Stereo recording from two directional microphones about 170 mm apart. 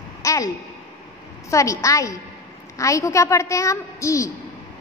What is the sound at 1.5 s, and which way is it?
A woman's voice, 20° left (ahead or behind).